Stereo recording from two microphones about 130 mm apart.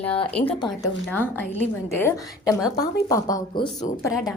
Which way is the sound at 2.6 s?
30° left (ahead or behind).